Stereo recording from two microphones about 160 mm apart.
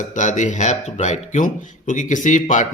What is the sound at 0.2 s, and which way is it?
Speech, 50° left (ahead or behind).